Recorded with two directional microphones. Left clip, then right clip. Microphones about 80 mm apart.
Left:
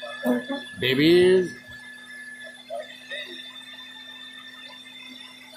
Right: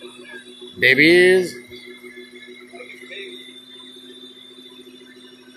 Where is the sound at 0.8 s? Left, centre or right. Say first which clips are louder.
Right 6 dB; left.